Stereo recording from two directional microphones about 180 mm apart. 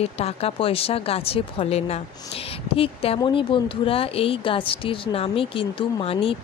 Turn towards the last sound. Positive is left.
turn(degrees=30)  # may be behind; listen again after turning